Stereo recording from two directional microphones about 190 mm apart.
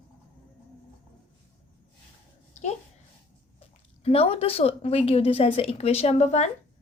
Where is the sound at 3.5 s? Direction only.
30° left (ahead or behind).